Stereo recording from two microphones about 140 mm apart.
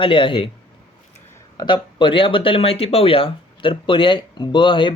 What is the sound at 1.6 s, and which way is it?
Speech, 35° left (ahead or behind).